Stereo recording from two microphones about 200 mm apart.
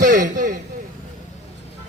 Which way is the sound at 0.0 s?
40° right (ahead or behind).